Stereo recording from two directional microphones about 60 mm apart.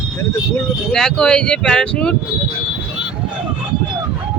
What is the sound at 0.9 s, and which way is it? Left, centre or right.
Speech, centre.